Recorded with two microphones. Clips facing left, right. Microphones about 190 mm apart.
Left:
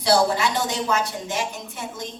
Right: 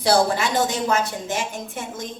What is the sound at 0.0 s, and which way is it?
A woman's voice, 50° right (ahead or behind).